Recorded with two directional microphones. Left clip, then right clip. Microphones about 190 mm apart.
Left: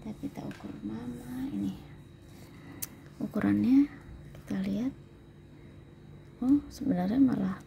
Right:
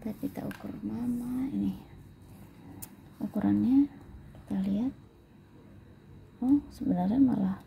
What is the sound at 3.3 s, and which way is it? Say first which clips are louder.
Speech: left 1 dB; 20° left (ahead or behind).